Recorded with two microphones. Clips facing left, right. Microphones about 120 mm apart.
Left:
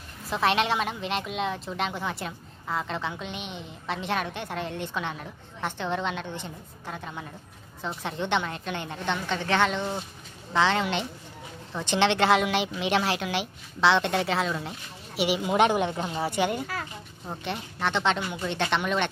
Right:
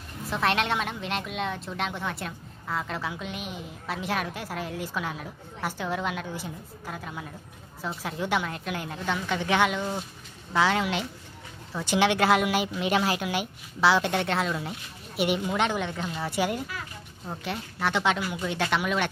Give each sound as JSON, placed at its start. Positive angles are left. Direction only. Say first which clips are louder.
{"t": 0.3, "sound": "a woman's voice", "louder": "left 2 dB", "side_deg": 0}
{"t": 15.4, "sound": "a woman's voice", "louder": "left 5 dB", "side_deg": 20}
{"t": 16.3, "sound": "a woman's voice", "louder": "even", "side_deg": 0}